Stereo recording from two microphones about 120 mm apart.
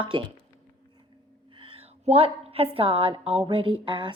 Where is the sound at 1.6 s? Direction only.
50° right (ahead or behind).